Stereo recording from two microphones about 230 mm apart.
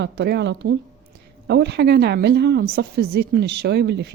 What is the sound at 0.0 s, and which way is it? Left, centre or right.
A woman's voice, right.